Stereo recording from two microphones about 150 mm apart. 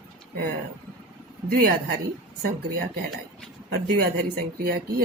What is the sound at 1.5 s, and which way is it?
Speech, 85° right.